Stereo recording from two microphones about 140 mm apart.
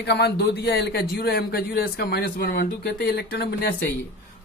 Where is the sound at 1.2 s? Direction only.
90° left.